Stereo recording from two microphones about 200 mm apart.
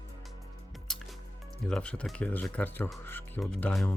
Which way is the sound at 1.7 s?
5° left (ahead or behind).